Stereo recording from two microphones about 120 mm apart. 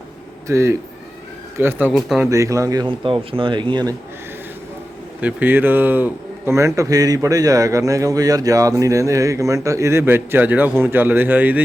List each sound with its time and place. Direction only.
0.4 s speech: 25° right (ahead or behind)
1.9 s speech: centre (ahead or behind)
2.2 s speech: 25° right (ahead or behind)
2.8 s speech: 45° right (ahead or behind)
5.2 s speech: 15° right (ahead or behind)